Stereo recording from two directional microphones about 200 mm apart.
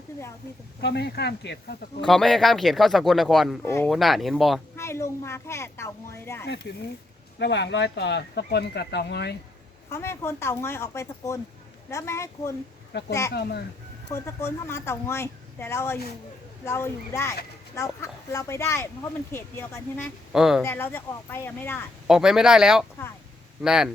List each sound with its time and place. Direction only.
0.8 s speech: 55° left (ahead or behind)
2.0 s speech: centre (ahead or behind)
3.6 s a woman's voice: 15° left (ahead or behind)
3.8 s speech: centre (ahead or behind)
4.8 s a woman's voice: 15° left (ahead or behind)
7.3 s speech: 60° left (ahead or behind)
9.9 s a woman's voice: 10° left (ahead or behind)
12.9 s speech: 55° left (ahead or behind)
14.1 s a woman's voice: 15° left (ahead or behind)
20.3 s speech: 5° right (ahead or behind)
20.6 s a woman's voice: 10° left (ahead or behind)
22.0 s speech: centre (ahead or behind)